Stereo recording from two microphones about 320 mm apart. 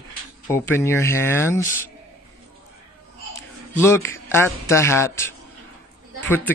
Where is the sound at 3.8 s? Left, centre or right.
Centre.